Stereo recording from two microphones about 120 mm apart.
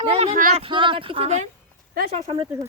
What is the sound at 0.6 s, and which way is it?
Speech, 45° right (ahead or behind).